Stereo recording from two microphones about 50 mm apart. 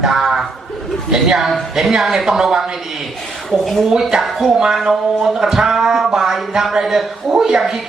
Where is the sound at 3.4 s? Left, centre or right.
Centre.